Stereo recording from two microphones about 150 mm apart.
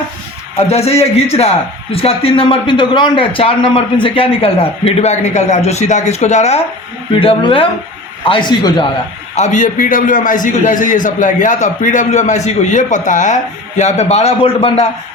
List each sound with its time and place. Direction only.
0.7 s a man's voice: 45° left (ahead or behind)
7.2 s a man's voice: 35° left (ahead or behind)
9.3 s a man's voice: 55° left (ahead or behind)